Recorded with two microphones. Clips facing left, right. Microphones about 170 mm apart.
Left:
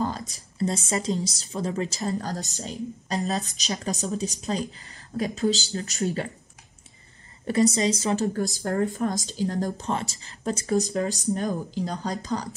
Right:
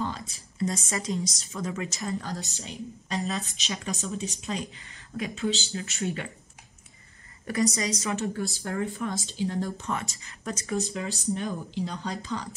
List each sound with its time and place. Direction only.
0.0 s a woman's voice: 40° left (ahead or behind)
7.7 s a woman's voice: 25° left (ahead or behind)